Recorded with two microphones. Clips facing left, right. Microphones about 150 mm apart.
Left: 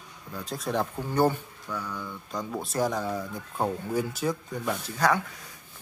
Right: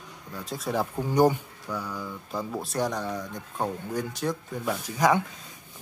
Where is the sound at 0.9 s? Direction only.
15° right (ahead or behind).